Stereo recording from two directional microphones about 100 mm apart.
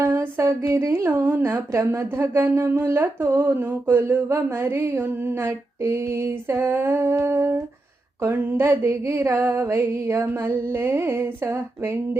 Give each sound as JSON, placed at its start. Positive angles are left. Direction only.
{"t": 0.0, "sound": "a woman's voice", "side_deg": -25}